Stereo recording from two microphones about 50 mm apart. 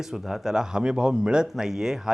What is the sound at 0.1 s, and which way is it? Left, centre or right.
Speech, centre.